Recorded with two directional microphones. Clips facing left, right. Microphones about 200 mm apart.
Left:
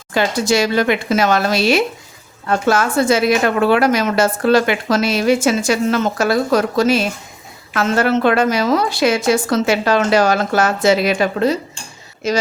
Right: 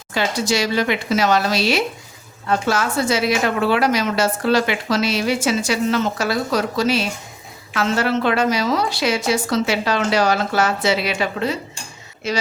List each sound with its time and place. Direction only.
0.1 s a woman's voice: 50° left (ahead or behind)